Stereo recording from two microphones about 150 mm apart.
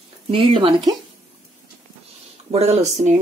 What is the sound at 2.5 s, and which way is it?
Speech, 45° right (ahead or behind).